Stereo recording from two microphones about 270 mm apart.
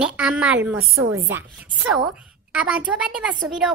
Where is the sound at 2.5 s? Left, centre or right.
Centre.